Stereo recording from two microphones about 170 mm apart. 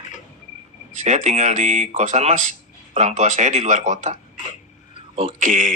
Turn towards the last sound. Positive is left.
turn(degrees=-50)  # may be behind; listen again after turning